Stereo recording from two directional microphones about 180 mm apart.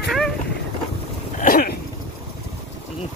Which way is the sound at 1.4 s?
50° left (ahead or behind).